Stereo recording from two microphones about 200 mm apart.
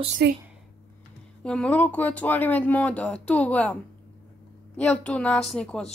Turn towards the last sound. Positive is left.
turn(degrees=5)  # may be behind; listen again after turning